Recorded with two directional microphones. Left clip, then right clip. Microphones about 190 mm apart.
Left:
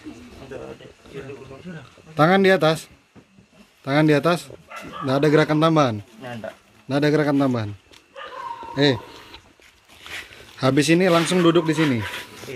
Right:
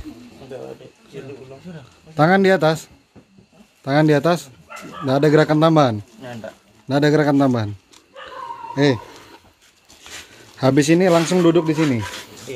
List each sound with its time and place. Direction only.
2.1 s speech: 10° right (ahead or behind)
7.9 s a sound: 15° right (ahead or behind)
10.6 s speech: 15° right (ahead or behind)